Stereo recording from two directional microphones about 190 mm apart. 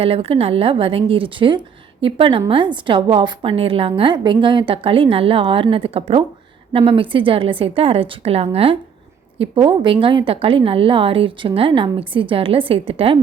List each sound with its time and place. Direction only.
0.0 s a woman's voice: 30° right (ahead or behind)